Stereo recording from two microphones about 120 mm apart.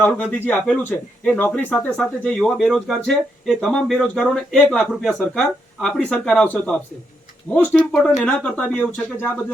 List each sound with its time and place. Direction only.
0.0 s speech: 15° left (ahead or behind)